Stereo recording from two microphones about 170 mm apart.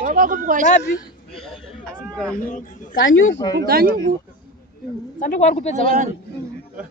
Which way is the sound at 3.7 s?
60° right (ahead or behind).